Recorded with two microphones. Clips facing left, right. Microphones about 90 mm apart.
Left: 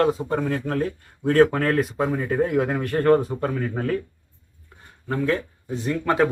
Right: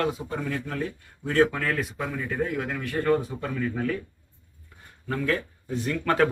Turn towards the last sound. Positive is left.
turn(degrees=15)  # may be behind; listen again after turning